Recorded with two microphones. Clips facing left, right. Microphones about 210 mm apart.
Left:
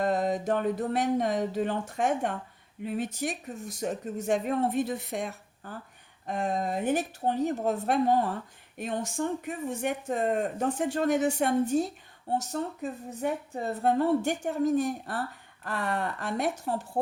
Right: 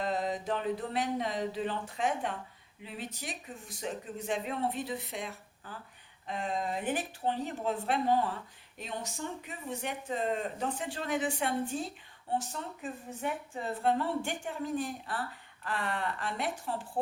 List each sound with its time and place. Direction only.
0.0 s speech: 45° left (ahead or behind)